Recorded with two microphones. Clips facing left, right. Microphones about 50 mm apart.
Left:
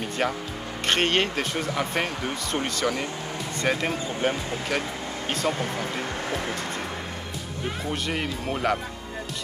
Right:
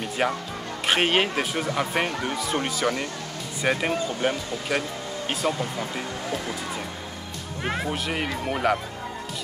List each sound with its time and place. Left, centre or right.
0.2 s speech: centre
5.4 s speech: centre
7.6 s speech: right
7.9 s speech: centre